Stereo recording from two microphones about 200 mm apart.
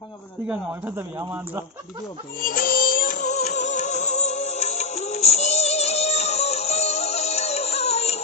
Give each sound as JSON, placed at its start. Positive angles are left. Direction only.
{"t": 0.4, "sound": "speech", "side_deg": -10}
{"t": 2.4, "sound": "music", "side_deg": 45}